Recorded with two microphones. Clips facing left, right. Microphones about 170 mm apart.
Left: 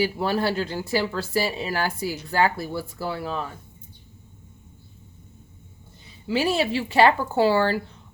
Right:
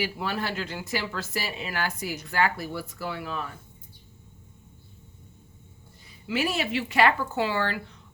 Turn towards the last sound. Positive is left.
turn(degrees=35)  # may be behind; listen again after turning